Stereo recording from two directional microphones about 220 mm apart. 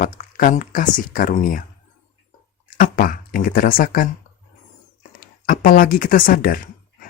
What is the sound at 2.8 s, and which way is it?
Speech, 40° left (ahead or behind).